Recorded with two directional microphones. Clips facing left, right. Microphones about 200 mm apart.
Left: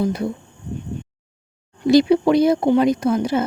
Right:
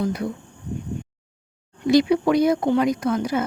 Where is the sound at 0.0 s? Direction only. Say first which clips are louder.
Left 3 dB; 30° left (ahead or behind).